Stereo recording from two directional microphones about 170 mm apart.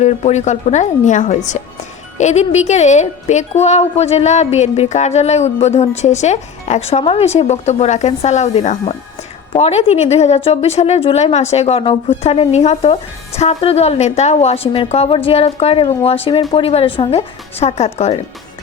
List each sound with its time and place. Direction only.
0.0 s a woman's voice: 40° left (ahead or behind)